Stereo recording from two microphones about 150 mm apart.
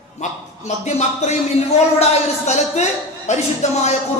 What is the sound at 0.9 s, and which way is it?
Speech, 50° left (ahead or behind).